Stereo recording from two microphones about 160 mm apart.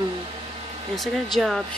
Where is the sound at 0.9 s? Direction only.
Centre (ahead or behind).